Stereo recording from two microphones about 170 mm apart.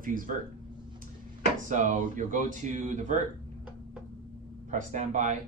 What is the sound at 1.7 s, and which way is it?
Speech, 50° right (ahead or behind).